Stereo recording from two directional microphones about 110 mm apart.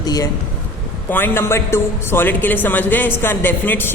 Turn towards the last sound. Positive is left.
turn(degrees=20)  # may be behind; listen again after turning